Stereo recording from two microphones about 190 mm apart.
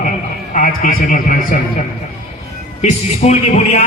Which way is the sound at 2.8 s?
35° left (ahead or behind).